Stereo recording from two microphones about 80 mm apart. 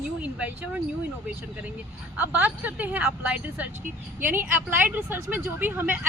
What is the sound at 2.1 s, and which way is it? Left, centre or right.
A woman's voice, right.